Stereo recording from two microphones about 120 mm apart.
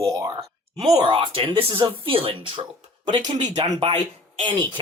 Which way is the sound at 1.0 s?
45° right (ahead or behind).